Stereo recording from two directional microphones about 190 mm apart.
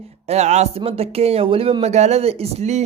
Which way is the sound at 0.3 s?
35° right (ahead or behind).